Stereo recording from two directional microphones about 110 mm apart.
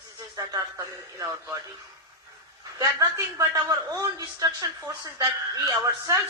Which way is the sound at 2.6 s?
30° right (ahead or behind).